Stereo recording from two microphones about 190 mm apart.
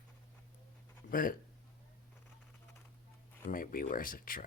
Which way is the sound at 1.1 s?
50° left (ahead or behind).